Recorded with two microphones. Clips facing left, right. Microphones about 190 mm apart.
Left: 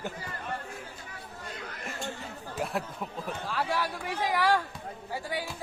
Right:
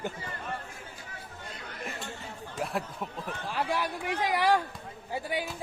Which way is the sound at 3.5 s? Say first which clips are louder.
Right 1 dB; 20° right (ahead or behind).